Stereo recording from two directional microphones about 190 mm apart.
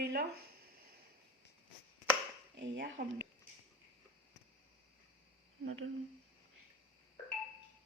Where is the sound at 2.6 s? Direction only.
75° right (ahead or behind).